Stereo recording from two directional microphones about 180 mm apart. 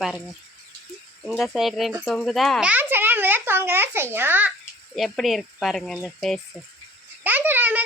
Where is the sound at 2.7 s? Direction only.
10° right (ahead or behind).